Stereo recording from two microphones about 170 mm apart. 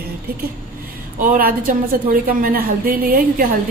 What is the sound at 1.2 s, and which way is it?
A woman's voice, 55° right (ahead or behind).